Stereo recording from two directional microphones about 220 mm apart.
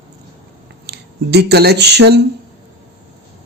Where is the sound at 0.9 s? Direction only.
50° right (ahead or behind).